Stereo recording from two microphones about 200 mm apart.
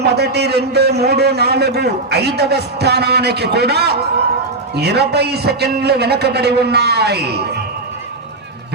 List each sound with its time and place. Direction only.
0.0 s a man's voice: 55° right (ahead or behind)